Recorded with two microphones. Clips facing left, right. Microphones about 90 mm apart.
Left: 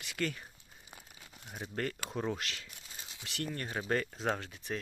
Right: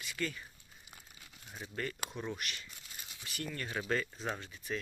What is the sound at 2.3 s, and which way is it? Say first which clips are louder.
Speech: left 2 dB; 90° left.